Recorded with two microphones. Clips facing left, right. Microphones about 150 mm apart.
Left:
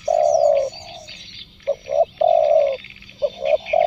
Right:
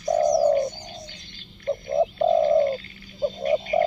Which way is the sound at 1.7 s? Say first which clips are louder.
Left 4 dB; 25° left (ahead or behind).